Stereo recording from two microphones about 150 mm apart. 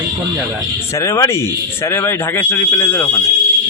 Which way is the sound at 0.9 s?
20° left (ahead or behind).